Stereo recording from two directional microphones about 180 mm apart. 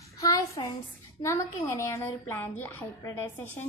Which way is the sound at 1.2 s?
15° left (ahead or behind).